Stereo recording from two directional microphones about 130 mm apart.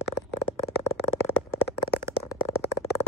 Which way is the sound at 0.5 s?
20° left (ahead or behind).